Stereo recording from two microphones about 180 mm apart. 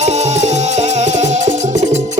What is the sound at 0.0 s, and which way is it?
Music, 40° right (ahead or behind).